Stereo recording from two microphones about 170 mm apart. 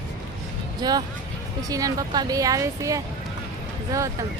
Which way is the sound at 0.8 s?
25° right (ahead or behind).